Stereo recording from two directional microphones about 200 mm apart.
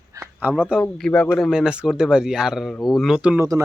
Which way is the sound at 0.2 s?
10° right (ahead or behind).